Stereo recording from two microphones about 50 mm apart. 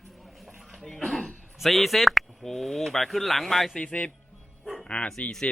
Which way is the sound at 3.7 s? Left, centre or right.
Left.